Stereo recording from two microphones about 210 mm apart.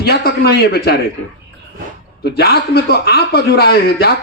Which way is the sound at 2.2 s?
50° left (ahead or behind).